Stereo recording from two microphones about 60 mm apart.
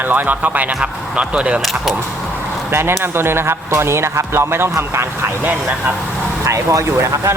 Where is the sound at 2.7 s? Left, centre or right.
Right.